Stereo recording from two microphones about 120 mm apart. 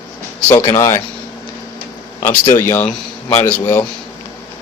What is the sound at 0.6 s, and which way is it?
Speech, 25° left (ahead or behind).